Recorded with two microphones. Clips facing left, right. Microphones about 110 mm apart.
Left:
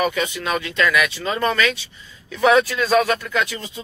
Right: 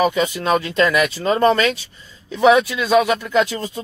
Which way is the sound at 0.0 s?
30° right (ahead or behind).